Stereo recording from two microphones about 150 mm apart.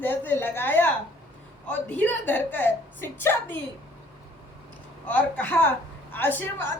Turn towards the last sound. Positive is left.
turn(degrees=15)  # may be behind; listen again after turning